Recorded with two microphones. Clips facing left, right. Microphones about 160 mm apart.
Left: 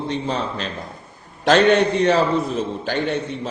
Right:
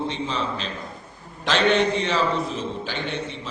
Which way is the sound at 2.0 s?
45° left (ahead or behind).